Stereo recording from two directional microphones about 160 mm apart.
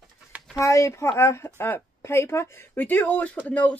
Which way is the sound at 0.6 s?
20° left (ahead or behind).